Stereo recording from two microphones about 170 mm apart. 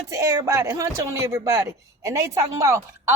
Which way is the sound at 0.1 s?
15° right (ahead or behind).